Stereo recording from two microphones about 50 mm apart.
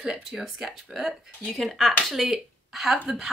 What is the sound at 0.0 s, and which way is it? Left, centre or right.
Speech, centre.